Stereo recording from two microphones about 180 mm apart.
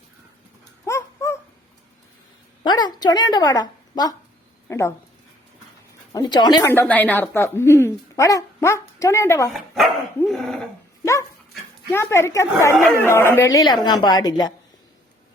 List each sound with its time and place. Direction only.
0.9 s dog: 15° left (ahead or behind)
2.6 s a woman's voice: 25° left (ahead or behind)
6.1 s a woman's voice: 25° left (ahead or behind)
6.7 s speech: 10° left (ahead or behind)
9.5 s speech: centre (ahead or behind)
11.0 s dog: 15° left (ahead or behind)
11.9 s a woman's voice: 15° left (ahead or behind)